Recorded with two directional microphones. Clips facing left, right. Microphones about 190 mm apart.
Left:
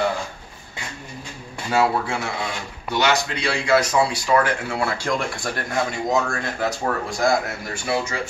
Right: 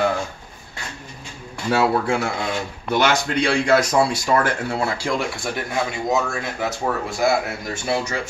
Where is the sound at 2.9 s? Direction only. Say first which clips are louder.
Right 1 dB; 50° right (ahead or behind).